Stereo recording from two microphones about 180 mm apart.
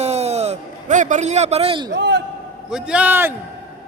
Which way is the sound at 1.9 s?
80° right.